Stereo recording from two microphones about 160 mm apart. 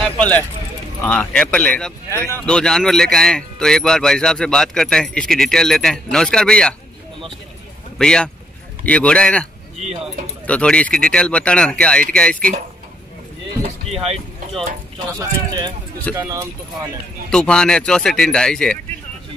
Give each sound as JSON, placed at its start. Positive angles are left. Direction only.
{"t": 0.2, "sound": "speech", "side_deg": 10}
{"t": 8.0, "sound": "speech", "side_deg": 5}
{"t": 15.1, "sound": "speech", "side_deg": -25}
{"t": 17.3, "sound": "speech", "side_deg": 5}